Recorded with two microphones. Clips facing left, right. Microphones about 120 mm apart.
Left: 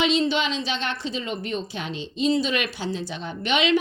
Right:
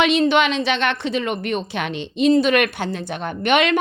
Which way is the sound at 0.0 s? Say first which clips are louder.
Right 6 dB; 60° right (ahead or behind).